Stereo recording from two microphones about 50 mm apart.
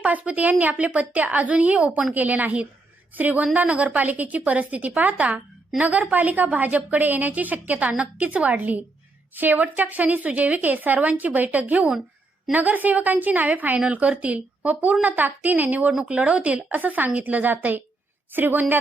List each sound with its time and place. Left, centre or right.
0.0 s a woman's voice: right
15.9 s a woman's voice: centre; by 18.6 s right